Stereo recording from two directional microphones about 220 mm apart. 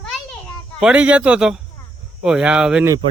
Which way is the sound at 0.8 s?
5° right (ahead or behind).